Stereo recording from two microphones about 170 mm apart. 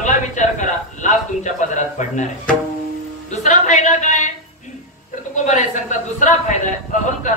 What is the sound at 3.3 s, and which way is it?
Speech, 45° left (ahead or behind).